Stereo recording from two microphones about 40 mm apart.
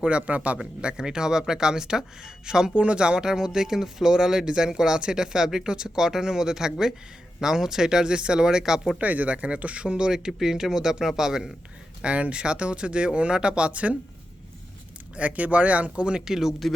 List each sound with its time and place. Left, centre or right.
0.0 s speech: right
0.8 s speech: right
2.7 s speech: right
9.0 s speech: right
10.1 s speech: centre
12.0 s speech: right
15.1 s speech: right; by 16.6 s centre